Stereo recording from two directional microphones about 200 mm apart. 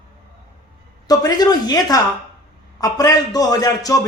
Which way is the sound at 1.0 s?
20° left (ahead or behind).